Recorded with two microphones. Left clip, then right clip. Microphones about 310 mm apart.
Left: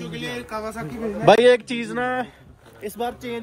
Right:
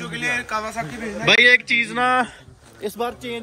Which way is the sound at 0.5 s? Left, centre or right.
Centre.